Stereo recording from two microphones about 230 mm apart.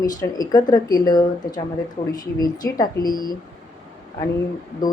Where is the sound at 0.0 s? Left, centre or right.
Centre.